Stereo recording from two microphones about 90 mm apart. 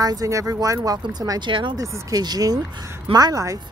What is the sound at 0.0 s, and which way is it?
Speech, 45° right (ahead or behind).